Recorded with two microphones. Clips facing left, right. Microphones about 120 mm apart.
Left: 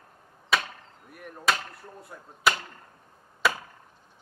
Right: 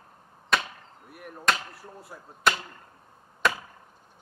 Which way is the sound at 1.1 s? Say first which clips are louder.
Even; 5° right (ahead or behind).